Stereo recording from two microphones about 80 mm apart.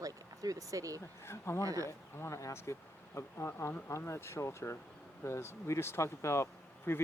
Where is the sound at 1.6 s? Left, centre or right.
Right.